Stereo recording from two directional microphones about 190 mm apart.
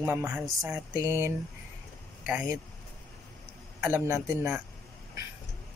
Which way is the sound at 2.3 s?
5° right (ahead or behind).